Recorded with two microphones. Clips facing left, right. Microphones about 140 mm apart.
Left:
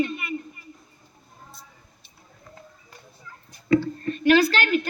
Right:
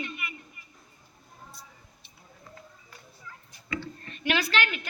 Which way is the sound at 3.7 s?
40° left (ahead or behind).